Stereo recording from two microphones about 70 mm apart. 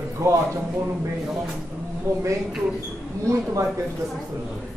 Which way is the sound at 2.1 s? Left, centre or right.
Right.